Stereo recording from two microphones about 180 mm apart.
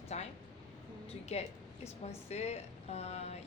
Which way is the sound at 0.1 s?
40° left (ahead or behind).